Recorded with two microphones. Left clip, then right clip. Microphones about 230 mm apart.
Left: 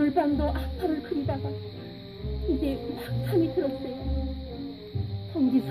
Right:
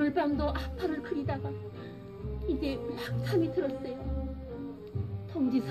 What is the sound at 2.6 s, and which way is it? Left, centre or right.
Speech, left.